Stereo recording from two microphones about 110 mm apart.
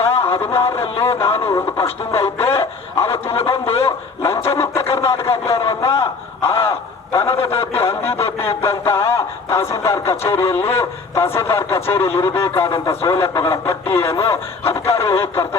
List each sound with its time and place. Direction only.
0.2 s speech: 20° left (ahead or behind)